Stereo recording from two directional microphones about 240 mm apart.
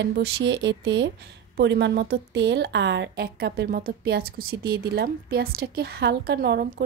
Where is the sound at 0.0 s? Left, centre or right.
Right.